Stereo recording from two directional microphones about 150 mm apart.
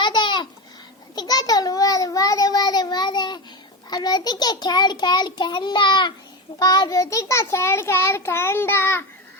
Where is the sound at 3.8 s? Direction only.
25° left (ahead or behind).